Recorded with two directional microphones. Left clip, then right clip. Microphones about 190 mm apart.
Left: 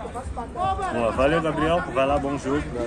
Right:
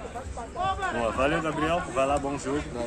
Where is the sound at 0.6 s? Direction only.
25° left (ahead or behind).